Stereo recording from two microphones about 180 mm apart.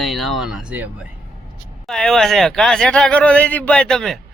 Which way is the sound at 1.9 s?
Centre (ahead or behind).